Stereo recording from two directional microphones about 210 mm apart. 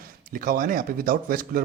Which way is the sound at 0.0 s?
45° right (ahead or behind).